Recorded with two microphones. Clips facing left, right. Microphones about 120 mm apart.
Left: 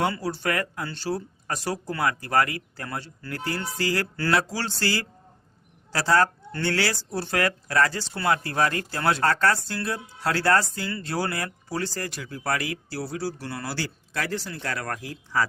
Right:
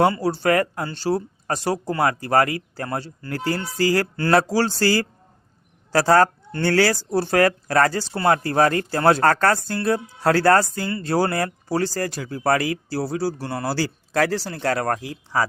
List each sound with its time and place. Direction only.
0.0 s speech: 35° right (ahead or behind)
15.1 s speech: 15° right (ahead or behind)